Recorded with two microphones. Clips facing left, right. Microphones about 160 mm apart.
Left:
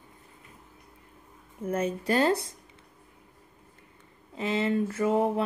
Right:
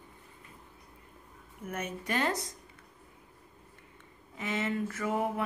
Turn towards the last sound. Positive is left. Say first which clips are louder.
# left 7 dB
turn(degrees=25)  # may be behind; listen again after turning